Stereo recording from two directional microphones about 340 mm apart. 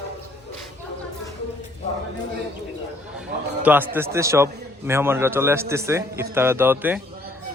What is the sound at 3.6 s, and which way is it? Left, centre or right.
A man's voice, centre.